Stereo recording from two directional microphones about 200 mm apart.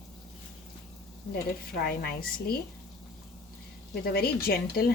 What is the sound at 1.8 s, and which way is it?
Speech, 50° left (ahead or behind).